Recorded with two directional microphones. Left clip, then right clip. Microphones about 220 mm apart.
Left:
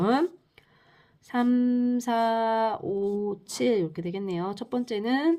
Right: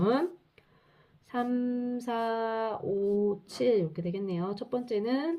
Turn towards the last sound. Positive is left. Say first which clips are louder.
# left 5 dB
turn(degrees=45)  # may be behind; listen again after turning